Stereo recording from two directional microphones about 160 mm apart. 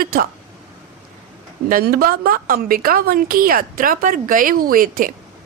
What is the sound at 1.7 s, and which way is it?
A woman's voice, 65° right (ahead or behind).